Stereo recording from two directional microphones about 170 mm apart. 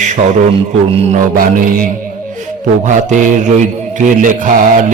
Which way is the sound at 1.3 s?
55° right (ahead or behind).